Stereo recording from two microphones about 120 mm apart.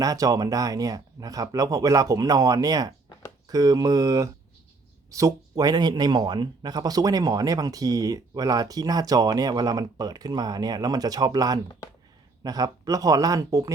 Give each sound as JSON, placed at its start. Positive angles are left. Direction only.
{"t": 0.0, "sound": "speech", "side_deg": -30}